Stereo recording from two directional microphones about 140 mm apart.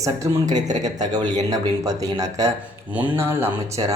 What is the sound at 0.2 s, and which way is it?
Speech, 30° right (ahead or behind).